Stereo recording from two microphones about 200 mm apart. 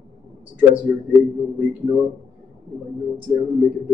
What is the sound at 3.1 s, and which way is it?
Speech, centre (ahead or behind).